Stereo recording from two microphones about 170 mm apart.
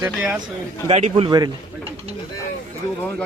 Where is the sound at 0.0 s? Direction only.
5° right (ahead or behind).